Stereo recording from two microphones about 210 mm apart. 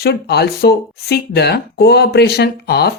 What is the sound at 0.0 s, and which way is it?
Speech, 50° left (ahead or behind).